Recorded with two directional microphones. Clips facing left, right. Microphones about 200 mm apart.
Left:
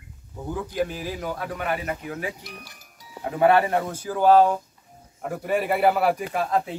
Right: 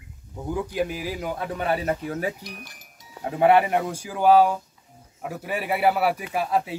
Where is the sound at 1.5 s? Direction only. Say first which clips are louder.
Right 7 dB; 30° right (ahead or behind).